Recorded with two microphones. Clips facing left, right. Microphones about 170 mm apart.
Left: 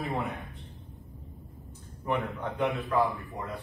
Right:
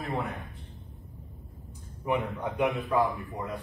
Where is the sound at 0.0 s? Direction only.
Centre (ahead or behind).